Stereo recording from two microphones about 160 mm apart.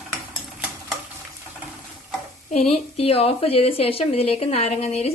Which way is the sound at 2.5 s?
40° left (ahead or behind).